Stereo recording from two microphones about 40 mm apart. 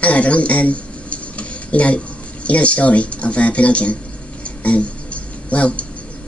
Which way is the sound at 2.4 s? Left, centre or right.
Left.